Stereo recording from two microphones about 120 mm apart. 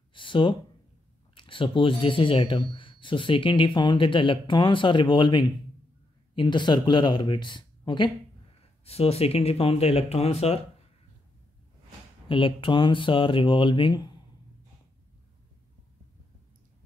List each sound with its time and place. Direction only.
0.1 s a sound: 45° left (ahead or behind)
1.3 s speech: 45° left (ahead or behind)
8.8 s speech: 55° left (ahead or behind)
12.3 s speech: 45° left (ahead or behind)